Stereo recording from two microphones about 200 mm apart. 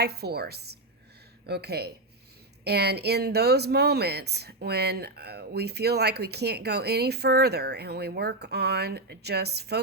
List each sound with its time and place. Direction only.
0.0 s a woman's voice: 55° right (ahead or behind)